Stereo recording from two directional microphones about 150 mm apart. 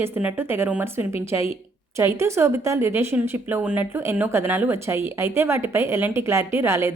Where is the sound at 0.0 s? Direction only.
15° right (ahead or behind).